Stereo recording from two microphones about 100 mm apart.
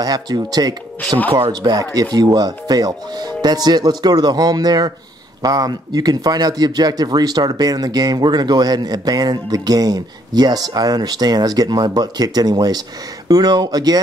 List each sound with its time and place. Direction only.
0.0 s speech: 40° right (ahead or behind)